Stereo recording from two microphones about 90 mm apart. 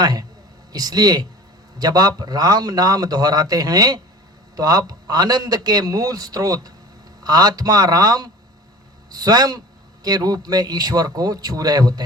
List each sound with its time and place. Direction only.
0.0 s a man's voice: 50° right (ahead or behind)